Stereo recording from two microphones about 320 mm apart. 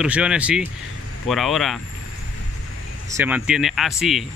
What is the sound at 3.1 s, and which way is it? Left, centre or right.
Speech, centre.